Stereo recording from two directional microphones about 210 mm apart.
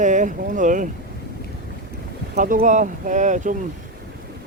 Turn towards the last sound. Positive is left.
turn(degrees=-35)  # may be behind; listen again after turning